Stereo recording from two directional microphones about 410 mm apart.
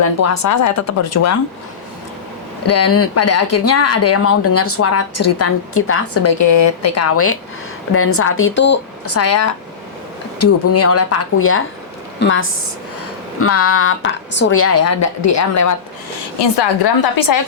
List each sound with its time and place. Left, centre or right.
0.0 s speech: left
2.6 s speech: left
16.4 s a woman's voice: left